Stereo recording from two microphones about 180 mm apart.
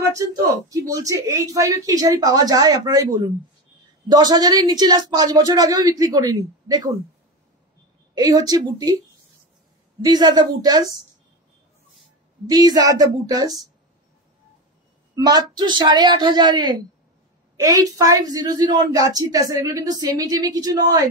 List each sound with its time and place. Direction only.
0.1 s a woman's voice: 15° right (ahead or behind)
8.1 s a woman's voice: 20° right (ahead or behind)
10.0 s a woman's voice: 25° right (ahead or behind)
12.4 s a woman's voice: 20° right (ahead or behind)
15.1 s a woman's voice: 20° right (ahead or behind)